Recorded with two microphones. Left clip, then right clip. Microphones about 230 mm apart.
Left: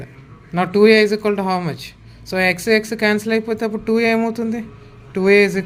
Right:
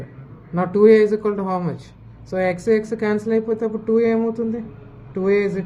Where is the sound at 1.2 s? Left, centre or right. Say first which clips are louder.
Left 3 dB; left.